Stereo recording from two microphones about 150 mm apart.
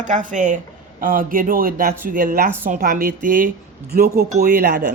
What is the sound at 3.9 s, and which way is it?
Speech, 90° right.